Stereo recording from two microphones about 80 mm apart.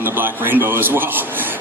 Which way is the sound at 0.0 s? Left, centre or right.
Right.